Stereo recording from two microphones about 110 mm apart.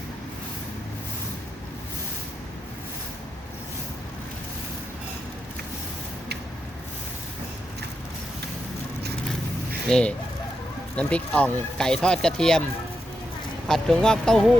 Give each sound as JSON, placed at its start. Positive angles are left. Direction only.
{"t": 9.9, "sound": "speech", "side_deg": 10}
{"t": 13.7, "sound": "speech", "side_deg": 5}